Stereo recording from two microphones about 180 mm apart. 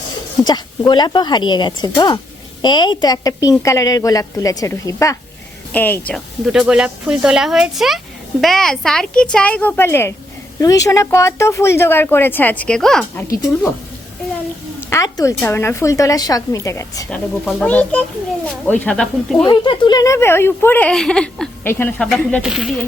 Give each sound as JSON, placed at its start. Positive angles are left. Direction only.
{"t": 0.4, "sound": "speech", "side_deg": 25}
{"t": 14.8, "sound": "speech", "side_deg": 15}
{"t": 17.1, "sound": "speech", "side_deg": 5}
{"t": 19.5, "sound": "speech", "side_deg": 25}